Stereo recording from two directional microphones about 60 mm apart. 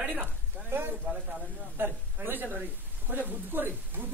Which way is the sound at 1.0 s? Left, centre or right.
Centre.